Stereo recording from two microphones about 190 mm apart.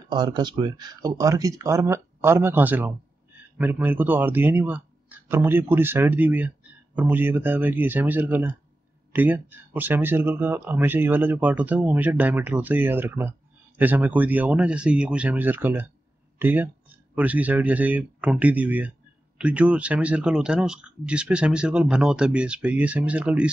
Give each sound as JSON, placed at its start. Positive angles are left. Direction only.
{"t": 0.1, "sound": "speech", "side_deg": -25}